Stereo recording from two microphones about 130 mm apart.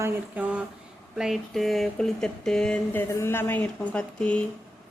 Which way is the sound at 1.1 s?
Centre (ahead or behind).